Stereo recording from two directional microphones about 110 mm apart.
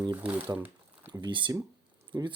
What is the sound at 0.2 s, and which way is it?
Speech, 15° right (ahead or behind).